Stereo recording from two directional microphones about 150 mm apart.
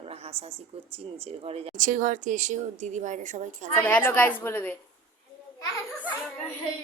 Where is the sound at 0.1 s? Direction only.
40° right (ahead or behind).